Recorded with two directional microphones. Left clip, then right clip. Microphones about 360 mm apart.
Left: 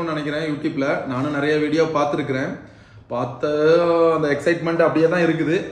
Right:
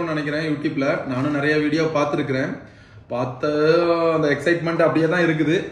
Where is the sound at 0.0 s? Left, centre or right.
Centre.